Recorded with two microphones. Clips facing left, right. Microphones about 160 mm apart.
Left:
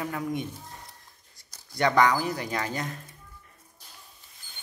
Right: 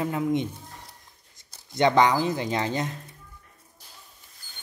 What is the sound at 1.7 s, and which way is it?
Speech, 20° right (ahead or behind).